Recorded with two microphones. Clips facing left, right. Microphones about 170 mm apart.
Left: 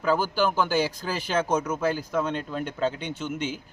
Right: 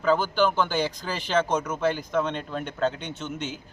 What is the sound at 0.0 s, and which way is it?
A man's voice, 10° left (ahead or behind).